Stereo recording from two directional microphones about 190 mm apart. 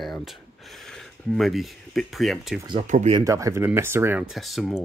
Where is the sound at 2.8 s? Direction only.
40° right (ahead or behind).